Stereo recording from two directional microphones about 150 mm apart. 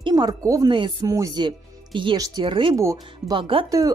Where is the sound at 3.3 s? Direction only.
35° right (ahead or behind).